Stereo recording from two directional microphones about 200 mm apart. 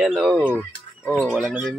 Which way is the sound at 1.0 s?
5° left (ahead or behind).